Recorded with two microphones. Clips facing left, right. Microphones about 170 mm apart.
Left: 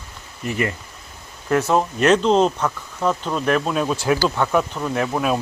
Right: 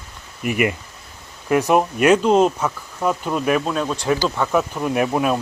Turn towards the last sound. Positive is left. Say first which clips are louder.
# right 3 dB
turn(degrees=-15)  # may be behind; listen again after turning